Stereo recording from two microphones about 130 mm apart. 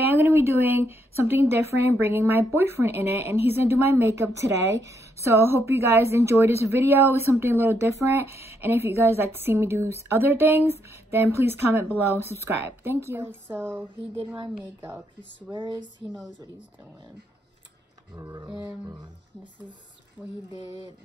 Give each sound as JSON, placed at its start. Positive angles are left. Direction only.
{"t": 0.1, "sound": "a woman's voice", "side_deg": -20}
{"t": 14.1, "sound": "speech", "side_deg": -40}
{"t": 15.5, "sound": "speech", "side_deg": -40}
{"t": 18.1, "sound": "speech", "side_deg": -35}
{"t": 18.5, "sound": "a woman's voice", "side_deg": -10}
{"t": 20.2, "sound": "a sound", "side_deg": 0}